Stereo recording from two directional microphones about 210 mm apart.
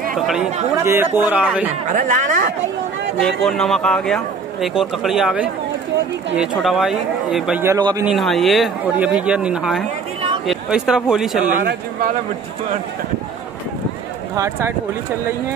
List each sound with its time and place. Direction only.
0.1 s a man's voice: centre (ahead or behind)
1.9 s speech: 40° right (ahead or behind)
3.2 s speech: centre (ahead or behind); by 8.1 s 15° right (ahead or behind)
8.1 s speech: centre (ahead or behind)
14.3 s a man's voice: 15° right (ahead or behind)